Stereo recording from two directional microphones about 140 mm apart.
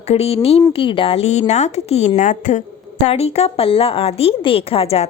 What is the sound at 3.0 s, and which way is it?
Speech, 50° left (ahead or behind).